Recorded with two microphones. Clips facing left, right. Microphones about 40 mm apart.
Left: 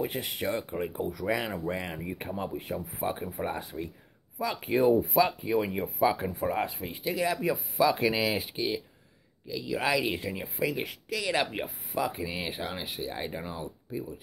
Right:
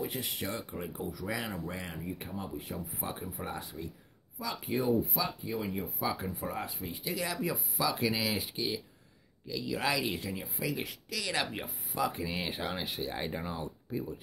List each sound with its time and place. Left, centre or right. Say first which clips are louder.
0.0 s speech: left 5 dB; left
7.2 s speech: left 6 dB; left
9.5 s speech: left 4 dB; centre
12.0 s speech: left 1 dB; centre